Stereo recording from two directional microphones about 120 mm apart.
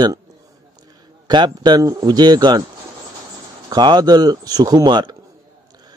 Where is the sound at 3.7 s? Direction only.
35° right (ahead or behind).